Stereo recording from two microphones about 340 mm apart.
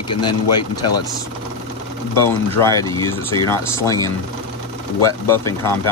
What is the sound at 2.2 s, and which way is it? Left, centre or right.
Speech, centre.